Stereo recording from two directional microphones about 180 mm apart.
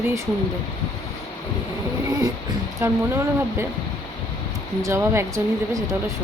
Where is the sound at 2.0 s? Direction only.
20° right (ahead or behind).